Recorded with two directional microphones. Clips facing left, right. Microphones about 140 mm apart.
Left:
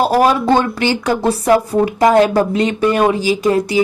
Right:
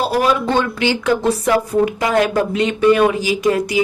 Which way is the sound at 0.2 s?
40° left (ahead or behind).